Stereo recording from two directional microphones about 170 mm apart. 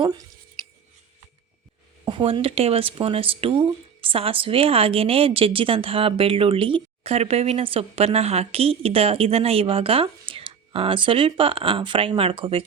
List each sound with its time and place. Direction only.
2.0 s speech: 30° right (ahead or behind)